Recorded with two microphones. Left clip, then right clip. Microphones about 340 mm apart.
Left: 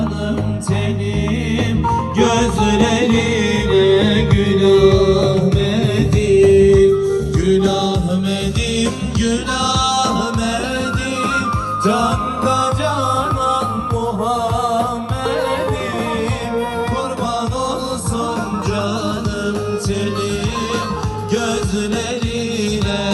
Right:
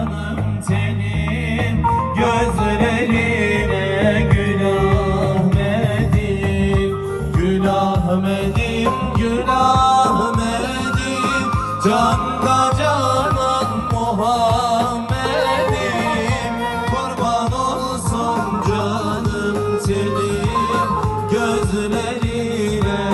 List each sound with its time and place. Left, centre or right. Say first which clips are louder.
1.9 s music: left 1 dB; centre
8.8 s music: right 1 dB; centre
11.8 s music: right 1 dB; right